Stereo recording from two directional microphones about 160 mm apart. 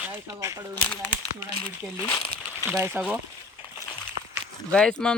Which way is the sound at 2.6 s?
15° right (ahead or behind).